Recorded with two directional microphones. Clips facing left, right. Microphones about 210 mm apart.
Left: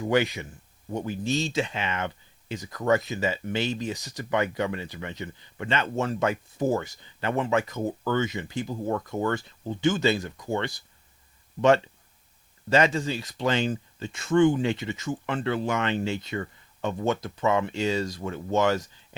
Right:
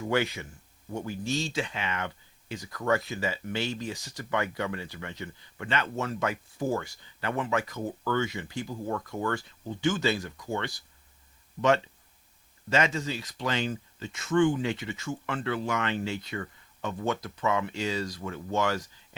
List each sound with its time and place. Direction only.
0.1 s speech: 15° left (ahead or behind)
12.7 s speech: 35° left (ahead or behind)